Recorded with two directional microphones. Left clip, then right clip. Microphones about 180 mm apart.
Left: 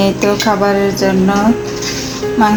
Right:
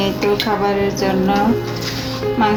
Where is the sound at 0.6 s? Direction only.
40° left (ahead or behind).